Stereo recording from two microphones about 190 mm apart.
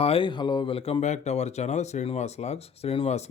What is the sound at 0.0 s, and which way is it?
Speech, 30° left (ahead or behind).